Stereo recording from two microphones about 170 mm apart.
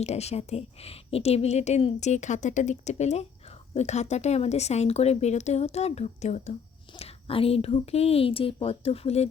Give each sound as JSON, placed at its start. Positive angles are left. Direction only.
{"t": 0.0, "sound": "a woman's voice", "side_deg": 40}